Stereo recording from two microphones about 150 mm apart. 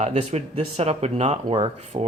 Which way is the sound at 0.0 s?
50° right (ahead or behind).